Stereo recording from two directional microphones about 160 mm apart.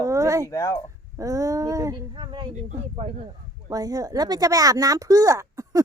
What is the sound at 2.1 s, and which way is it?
Speech, 30° right (ahead or behind).